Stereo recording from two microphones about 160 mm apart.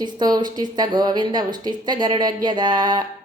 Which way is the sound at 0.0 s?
25° right (ahead or behind).